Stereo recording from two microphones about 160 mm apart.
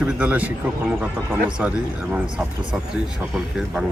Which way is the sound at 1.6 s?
5° right (ahead or behind).